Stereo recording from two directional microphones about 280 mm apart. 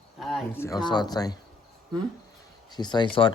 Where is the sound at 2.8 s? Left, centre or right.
Centre.